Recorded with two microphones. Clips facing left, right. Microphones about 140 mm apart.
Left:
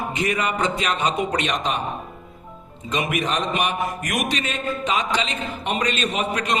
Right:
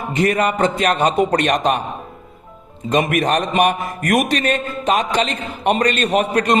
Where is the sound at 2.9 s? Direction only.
50° right (ahead or behind).